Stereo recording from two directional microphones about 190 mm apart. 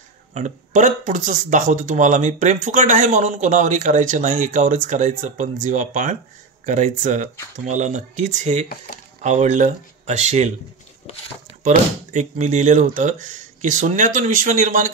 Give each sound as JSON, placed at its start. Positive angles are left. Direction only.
{"t": 0.3, "sound": "speech", "side_deg": -40}
{"t": 11.1, "sound": "speech", "side_deg": 35}
{"t": 11.6, "sound": "speech", "side_deg": -40}